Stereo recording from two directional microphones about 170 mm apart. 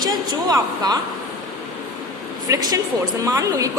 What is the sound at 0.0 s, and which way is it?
Speech, 25° right (ahead or behind).